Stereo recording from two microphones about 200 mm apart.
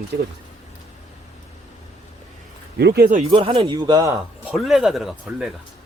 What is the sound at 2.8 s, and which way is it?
Speech, 55° right (ahead or behind).